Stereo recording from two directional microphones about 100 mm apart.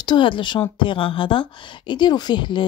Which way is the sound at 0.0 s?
55° left (ahead or behind).